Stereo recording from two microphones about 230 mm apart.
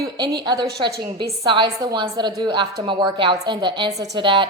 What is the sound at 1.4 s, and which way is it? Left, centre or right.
A woman's voice, centre.